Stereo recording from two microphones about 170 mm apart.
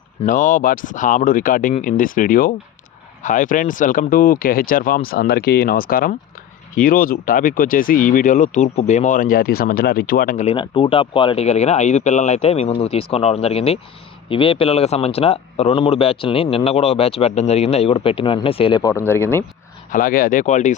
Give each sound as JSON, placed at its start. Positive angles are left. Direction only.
{"t": 0.3, "sound": "speech", "side_deg": 50}
{"t": 10.4, "sound": "speech", "side_deg": 30}
{"t": 18.8, "sound": "speech", "side_deg": 20}
{"t": 19.9, "sound": "speech", "side_deg": 55}